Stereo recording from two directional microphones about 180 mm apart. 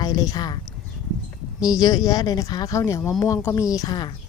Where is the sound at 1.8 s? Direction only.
20° left (ahead or behind).